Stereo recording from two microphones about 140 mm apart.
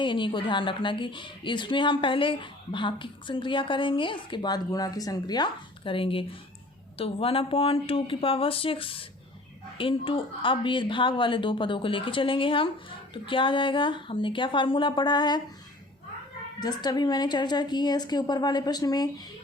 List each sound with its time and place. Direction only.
0.0 s speech: 35° left (ahead or behind)
16.6 s a woman's voice: 30° left (ahead or behind)